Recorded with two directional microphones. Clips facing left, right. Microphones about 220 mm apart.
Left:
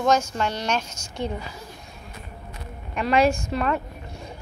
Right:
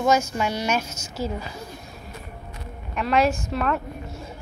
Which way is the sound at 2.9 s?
Centre (ahead or behind).